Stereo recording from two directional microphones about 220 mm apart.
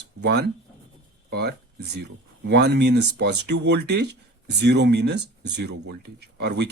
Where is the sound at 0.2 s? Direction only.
50° right (ahead or behind).